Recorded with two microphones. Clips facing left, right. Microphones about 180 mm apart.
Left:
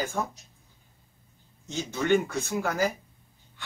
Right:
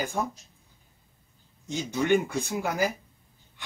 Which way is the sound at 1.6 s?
15° right (ahead or behind).